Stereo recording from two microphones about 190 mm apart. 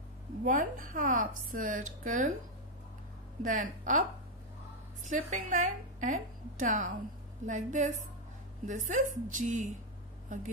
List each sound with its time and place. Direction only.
0.5 s a woman's voice: 45° right (ahead or behind)
3.4 s a woman's voice: 45° right (ahead or behind)
5.0 s a woman's voice: 40° right (ahead or behind)